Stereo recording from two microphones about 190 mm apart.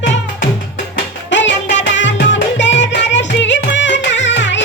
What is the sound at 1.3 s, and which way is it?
Music, 70° left (ahead or behind).